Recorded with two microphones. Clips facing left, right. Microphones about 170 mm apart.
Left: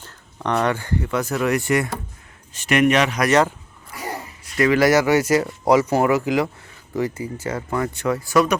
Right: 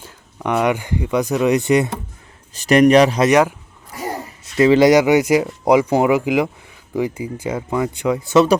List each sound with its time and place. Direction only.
0.0 s speech: 10° right (ahead or behind)
2.5 s speech: 35° right (ahead or behind)
3.2 s speech: 10° right (ahead or behind)
4.5 s speech: 25° right (ahead or behind)